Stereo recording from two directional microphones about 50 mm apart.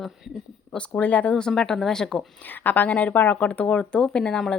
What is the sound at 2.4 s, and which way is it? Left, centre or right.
Speech, left.